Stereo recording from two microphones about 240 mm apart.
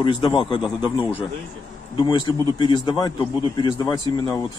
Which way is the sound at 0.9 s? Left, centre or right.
Centre.